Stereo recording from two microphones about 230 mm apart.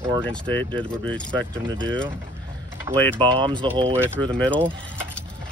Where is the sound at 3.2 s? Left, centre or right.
Right.